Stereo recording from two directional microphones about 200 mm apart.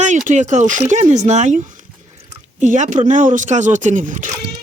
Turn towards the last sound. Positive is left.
turn(degrees=-40)  # may be behind; listen again after turning